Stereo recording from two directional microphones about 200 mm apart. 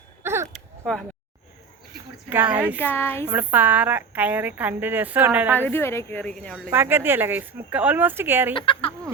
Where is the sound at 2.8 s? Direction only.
10° left (ahead or behind).